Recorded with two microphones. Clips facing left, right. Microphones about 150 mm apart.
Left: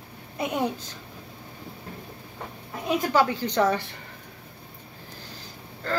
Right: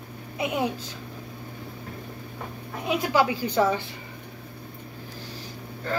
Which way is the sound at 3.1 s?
10° right (ahead or behind).